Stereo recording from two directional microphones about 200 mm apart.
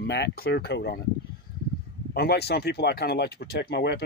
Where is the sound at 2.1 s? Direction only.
55° left (ahead or behind).